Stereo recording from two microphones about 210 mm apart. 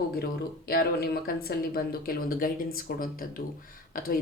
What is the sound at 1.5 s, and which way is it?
Speech, 45° left (ahead or behind).